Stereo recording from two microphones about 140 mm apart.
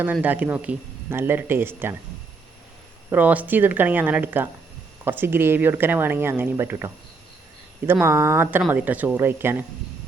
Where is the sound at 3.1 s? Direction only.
10° right (ahead or behind).